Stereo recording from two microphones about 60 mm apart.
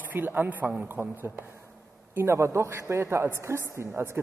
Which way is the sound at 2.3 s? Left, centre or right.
Right.